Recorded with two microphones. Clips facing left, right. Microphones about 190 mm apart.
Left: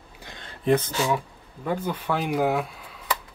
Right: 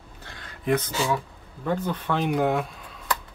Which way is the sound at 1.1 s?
10° left (ahead or behind).